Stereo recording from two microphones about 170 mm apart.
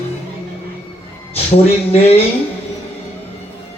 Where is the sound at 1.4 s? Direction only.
35° left (ahead or behind).